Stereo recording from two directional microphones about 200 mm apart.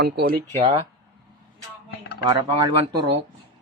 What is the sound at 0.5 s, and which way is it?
Speech, 30° right (ahead or behind).